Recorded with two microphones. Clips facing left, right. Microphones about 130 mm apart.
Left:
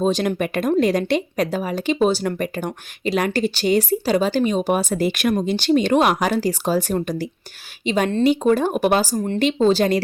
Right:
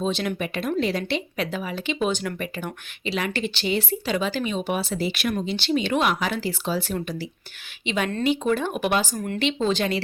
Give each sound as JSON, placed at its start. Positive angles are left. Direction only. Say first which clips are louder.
{"t": 0.0, "sound": "speech", "louder": "left 6 dB", "side_deg": 45}